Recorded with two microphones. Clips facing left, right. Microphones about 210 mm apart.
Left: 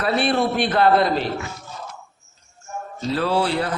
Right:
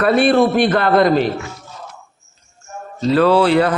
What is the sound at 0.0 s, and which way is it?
A man's voice, 50° right (ahead or behind).